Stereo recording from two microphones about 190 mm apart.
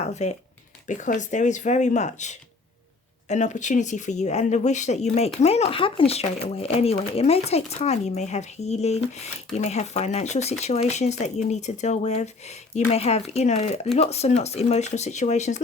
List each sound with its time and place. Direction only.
0.0 s speech: 35° left (ahead or behind)